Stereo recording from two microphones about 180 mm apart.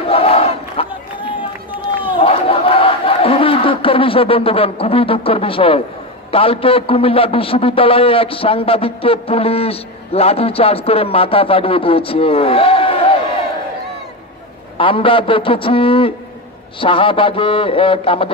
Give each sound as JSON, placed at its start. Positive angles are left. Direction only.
{"t": 0.1, "sound": "battle cry", "side_deg": 35}
{"t": 2.1, "sound": "battle cry", "side_deg": 30}
{"t": 6.3, "sound": "a man's voice", "side_deg": 30}
{"t": 14.8, "sound": "a man's voice", "side_deg": 30}